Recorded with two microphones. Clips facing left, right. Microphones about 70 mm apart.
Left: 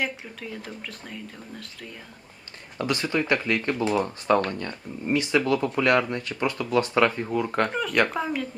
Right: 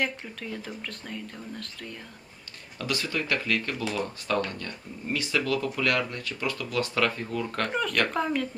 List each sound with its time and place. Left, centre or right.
0.0 s speech: centre
2.7 s speech: left
7.7 s speech: centre